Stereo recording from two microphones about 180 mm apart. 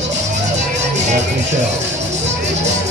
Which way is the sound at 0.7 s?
40° right (ahead or behind).